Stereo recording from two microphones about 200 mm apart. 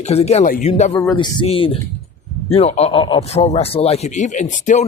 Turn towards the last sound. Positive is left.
turn(degrees=40)  # may be behind; listen again after turning